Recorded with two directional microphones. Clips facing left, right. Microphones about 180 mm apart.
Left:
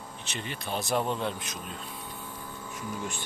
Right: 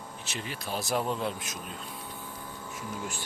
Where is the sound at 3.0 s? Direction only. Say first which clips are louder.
Left 1 dB; 5° right (ahead or behind).